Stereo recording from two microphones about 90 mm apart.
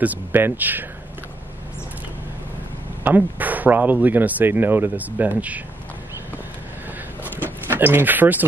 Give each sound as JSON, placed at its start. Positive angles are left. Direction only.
{"t": 0.0, "sound": "speech", "side_deg": -20}
{"t": 3.0, "sound": "speech", "side_deg": -20}
{"t": 7.2, "sound": "a sound", "side_deg": -20}